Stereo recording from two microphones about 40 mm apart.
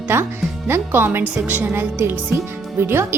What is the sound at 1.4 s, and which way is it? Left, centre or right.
Speech, right.